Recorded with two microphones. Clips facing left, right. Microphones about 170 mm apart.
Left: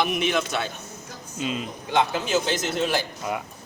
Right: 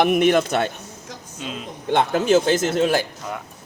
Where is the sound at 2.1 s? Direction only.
50° right (ahead or behind).